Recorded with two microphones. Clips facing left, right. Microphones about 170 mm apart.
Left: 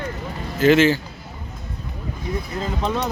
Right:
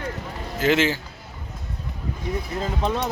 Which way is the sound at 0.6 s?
20° right (ahead or behind).